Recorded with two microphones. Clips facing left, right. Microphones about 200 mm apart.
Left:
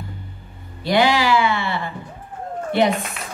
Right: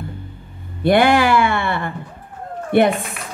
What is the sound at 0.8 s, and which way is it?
Speech, 55° right (ahead or behind).